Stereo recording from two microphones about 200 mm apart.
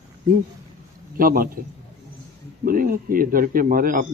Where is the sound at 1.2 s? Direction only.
45° right (ahead or behind).